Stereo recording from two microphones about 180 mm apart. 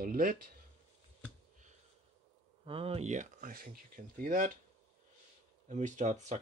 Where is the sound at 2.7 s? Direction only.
35° right (ahead or behind); by 4.5 s 50° right (ahead or behind).